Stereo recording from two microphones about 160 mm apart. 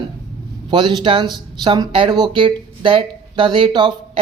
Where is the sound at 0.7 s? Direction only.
30° right (ahead or behind).